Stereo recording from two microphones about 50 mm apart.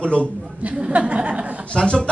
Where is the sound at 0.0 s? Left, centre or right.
Left.